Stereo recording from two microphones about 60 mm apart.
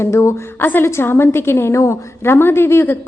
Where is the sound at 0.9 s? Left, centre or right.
Left.